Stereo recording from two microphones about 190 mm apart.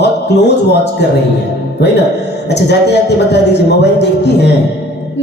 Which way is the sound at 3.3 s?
60° left (ahead or behind).